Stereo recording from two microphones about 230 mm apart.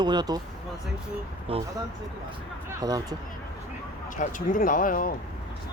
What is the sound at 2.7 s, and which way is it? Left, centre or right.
Speech, centre.